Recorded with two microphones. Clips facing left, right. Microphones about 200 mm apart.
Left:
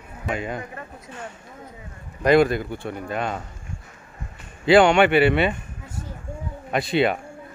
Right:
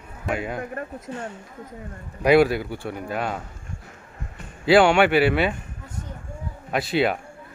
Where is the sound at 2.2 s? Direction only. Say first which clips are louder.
Even; 10° right (ahead or behind).